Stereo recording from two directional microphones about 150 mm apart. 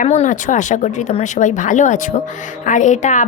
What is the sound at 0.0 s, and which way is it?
A woman's voice, 50° left (ahead or behind).